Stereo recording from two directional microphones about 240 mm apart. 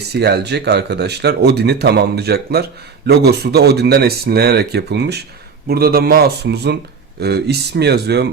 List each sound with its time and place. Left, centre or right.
0.1 s a man's voice: right